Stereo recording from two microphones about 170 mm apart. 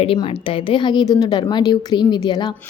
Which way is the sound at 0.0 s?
35° left (ahead or behind).